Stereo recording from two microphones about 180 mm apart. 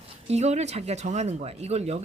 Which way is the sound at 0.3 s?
40° right (ahead or behind).